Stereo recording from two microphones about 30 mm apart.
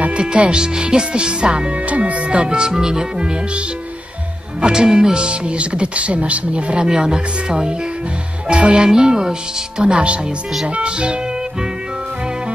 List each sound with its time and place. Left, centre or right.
0.5 s speech: right
1.9 s speech: right
2.2 s speech: right
4.6 s speech: right
6.9 s speech: right
8.5 s music: right
8.8 s speech: right